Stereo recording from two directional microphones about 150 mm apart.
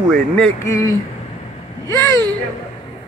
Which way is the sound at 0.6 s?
20° left (ahead or behind).